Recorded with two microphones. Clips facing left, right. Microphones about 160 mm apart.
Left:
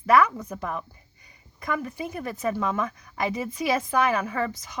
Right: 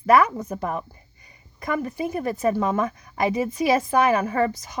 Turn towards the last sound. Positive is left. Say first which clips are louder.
# right 6 dB
turn(degrees=-45)  # may be behind; listen again after turning